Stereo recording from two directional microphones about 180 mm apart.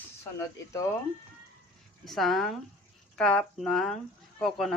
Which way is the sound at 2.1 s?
Centre (ahead or behind).